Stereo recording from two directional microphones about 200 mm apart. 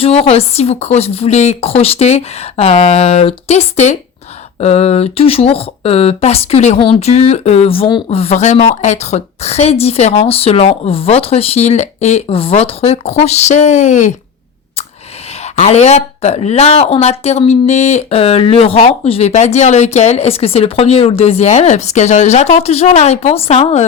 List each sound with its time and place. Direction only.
0.0 s speech: 30° left (ahead or behind)
15.5 s speech: 35° left (ahead or behind)